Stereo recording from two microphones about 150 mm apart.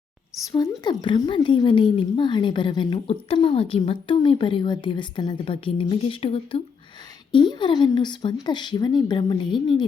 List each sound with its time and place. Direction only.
0.5 s a woman's voice: 30° left (ahead or behind)